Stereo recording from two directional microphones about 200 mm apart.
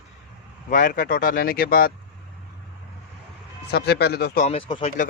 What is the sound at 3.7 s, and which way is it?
Speech, 55° left (ahead or behind).